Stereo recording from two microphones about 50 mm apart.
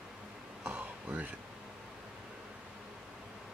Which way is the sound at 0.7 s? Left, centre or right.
Right.